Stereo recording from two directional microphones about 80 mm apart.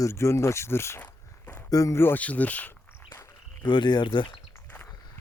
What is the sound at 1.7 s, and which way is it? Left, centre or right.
Speech, left.